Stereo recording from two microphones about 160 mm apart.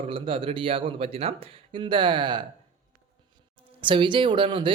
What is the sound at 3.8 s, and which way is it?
Speech, 30° right (ahead or behind).